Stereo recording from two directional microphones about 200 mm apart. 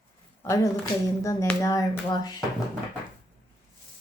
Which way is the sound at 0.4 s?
15° left (ahead or behind).